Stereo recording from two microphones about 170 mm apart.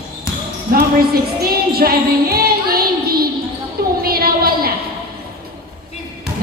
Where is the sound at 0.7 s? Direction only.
60° right (ahead or behind).